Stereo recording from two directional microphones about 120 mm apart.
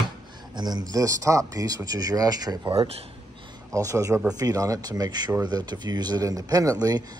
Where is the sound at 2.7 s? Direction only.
55° right (ahead or behind).